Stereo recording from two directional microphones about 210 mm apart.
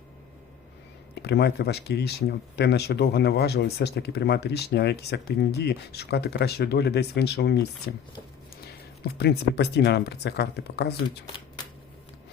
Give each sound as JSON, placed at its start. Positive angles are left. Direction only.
{"t": 1.2, "sound": "speech", "side_deg": 50}
{"t": 9.0, "sound": "speech", "side_deg": 50}